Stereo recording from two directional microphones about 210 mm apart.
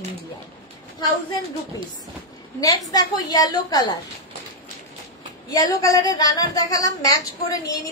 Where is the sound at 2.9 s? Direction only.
20° left (ahead or behind).